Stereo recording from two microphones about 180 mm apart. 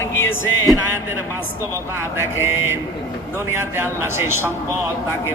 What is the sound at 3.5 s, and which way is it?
Speech, 15° right (ahead or behind).